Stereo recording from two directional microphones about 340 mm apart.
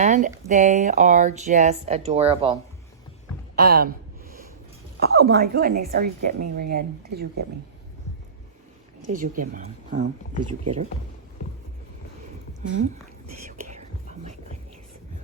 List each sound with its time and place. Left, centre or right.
0.0 s speech: right
3.6 s gasp: right
4.9 s speech: right
9.0 s speech: right